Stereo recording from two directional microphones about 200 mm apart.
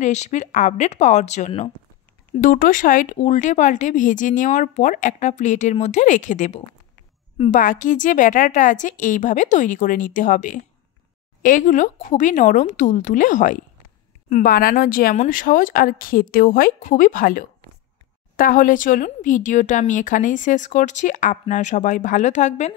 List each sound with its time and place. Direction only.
0.0 s speech: 35° left (ahead or behind)